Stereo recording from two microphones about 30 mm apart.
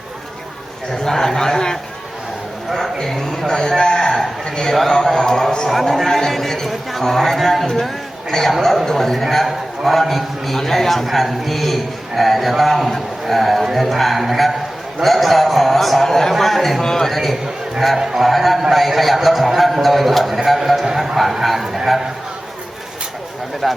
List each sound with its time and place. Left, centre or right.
1.0 s speech: centre
2.7 s speech: centre
3.9 s a sound: centre
4.7 s speech: centre
5.1 s a man's voice: centre
16.3 s a man's voice: centre
16.8 s speech: centre
17.1 s a man's voice: centre
17.9 s speech: centre
18.3 s a man's voice: centre
20.6 s a sound: centre
21.4 s a man's voice: centre
23.6 s a man's voice: centre